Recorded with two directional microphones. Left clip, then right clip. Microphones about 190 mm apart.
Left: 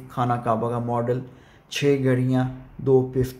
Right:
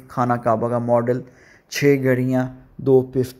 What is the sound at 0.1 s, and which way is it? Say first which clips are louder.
A man's voice: right 4 dB; 35° right (ahead or behind).